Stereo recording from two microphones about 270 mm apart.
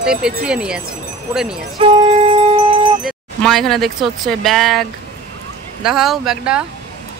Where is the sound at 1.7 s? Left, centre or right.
Centre.